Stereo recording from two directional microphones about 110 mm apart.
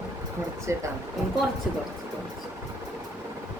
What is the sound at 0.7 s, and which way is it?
Laughter, 25° right (ahead or behind).